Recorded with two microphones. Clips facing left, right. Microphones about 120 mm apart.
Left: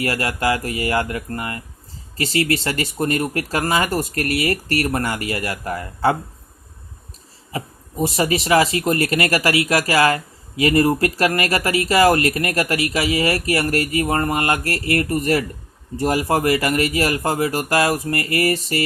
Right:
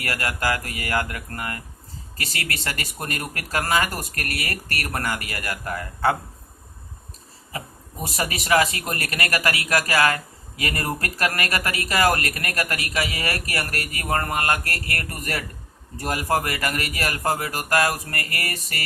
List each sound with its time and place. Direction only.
0.0 s a man's voice: 30° left (ahead or behind)
8.0 s a man's voice: 30° left (ahead or behind)